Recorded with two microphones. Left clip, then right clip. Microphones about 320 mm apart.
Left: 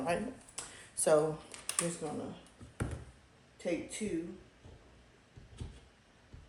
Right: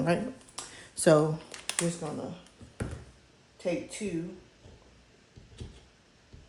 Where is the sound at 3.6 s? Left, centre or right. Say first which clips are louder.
Right 4 dB; centre.